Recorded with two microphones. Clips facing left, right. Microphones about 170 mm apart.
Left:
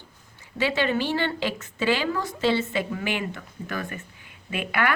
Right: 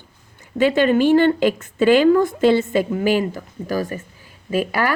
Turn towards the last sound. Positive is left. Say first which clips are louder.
# right 6 dB
turn(degrees=-35)  # may be behind; listen again after turning